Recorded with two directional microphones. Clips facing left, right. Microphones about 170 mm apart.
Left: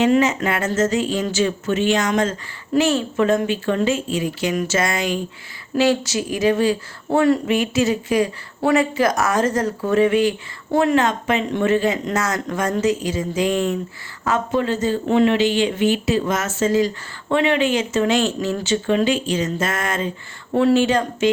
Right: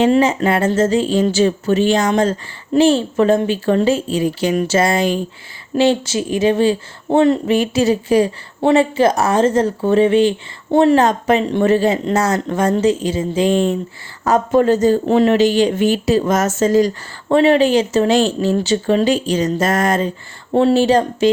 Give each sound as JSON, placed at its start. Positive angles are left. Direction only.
{"t": 0.0, "sound": "speech", "side_deg": -30}
{"t": 14.3, "sound": "speech", "side_deg": -40}